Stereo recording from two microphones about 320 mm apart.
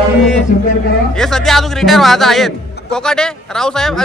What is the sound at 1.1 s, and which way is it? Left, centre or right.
A man's voice, centre.